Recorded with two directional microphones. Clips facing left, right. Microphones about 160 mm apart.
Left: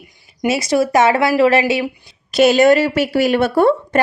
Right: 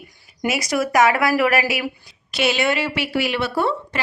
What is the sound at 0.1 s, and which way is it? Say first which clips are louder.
Speech: left 5 dB; 25° left (ahead or behind).